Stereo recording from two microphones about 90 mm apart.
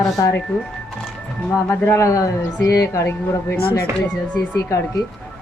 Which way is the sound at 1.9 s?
35° left (ahead or behind).